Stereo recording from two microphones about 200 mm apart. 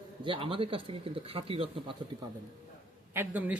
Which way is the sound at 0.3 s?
25° right (ahead or behind).